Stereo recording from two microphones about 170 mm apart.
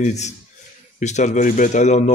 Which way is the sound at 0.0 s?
40° left (ahead or behind).